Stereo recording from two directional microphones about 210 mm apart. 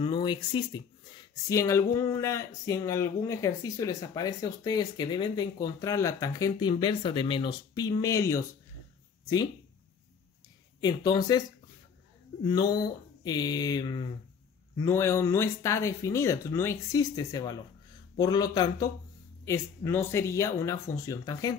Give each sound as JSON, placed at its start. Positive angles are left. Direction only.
{"t": 0.0, "sound": "speech", "side_deg": 25}
{"t": 10.8, "sound": "speech", "side_deg": 20}
{"t": 12.4, "sound": "speech", "side_deg": 20}